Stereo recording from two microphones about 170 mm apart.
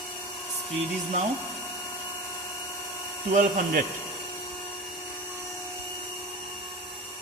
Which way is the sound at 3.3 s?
60° right (ahead or behind).